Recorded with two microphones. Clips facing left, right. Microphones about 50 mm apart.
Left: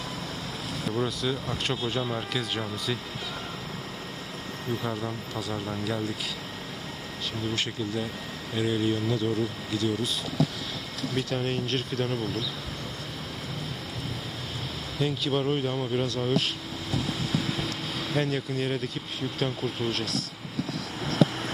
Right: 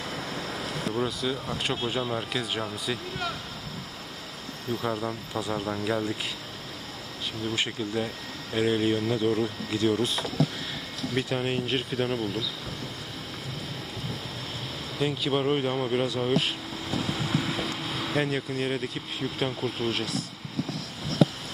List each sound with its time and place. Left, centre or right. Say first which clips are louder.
0.9 s speech: left 1 dB; centre
4.9 s speech: right 2 dB; centre
5.4 s speech: right 3 dB; right
7.5 s speech: right 3 dB; centre
9.7 s speech: right 3 dB; right
11.1 s speech: right 1 dB; centre
14.9 s speech: right 1 dB; centre
16.9 s vehicle: right 1 dB; centre
19.4 s speech: even; centre